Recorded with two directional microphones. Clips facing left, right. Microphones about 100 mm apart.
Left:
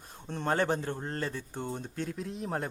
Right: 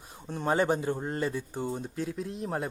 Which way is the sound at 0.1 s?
10° right (ahead or behind).